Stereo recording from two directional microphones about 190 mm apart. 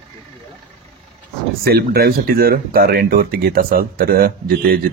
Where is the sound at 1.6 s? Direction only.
55° right (ahead or behind).